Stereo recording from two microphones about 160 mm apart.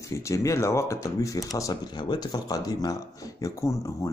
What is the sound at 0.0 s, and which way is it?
Speech, 20° left (ahead or behind).